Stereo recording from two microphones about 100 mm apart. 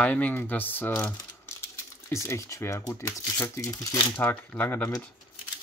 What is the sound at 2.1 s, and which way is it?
Speech, 30° left (ahead or behind).